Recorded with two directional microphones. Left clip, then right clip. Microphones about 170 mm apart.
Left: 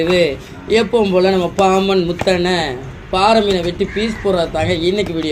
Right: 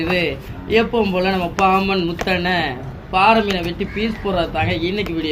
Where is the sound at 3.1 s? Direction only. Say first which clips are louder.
Left 1 dB; 30° left (ahead or behind).